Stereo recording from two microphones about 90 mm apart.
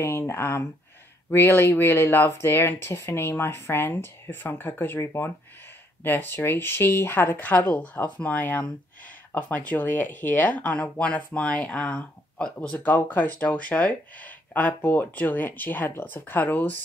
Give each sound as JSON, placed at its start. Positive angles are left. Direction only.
{"t": 0.0, "sound": "speech", "side_deg": 25}
{"t": 12.7, "sound": "speech", "side_deg": 20}